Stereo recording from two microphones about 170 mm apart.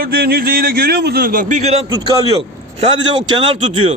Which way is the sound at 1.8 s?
20° right (ahead or behind).